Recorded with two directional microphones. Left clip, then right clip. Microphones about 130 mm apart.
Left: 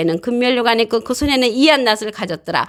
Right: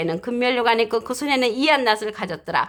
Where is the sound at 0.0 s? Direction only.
40° left (ahead or behind).